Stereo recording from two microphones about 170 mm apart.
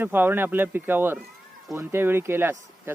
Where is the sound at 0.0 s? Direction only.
10° right (ahead or behind).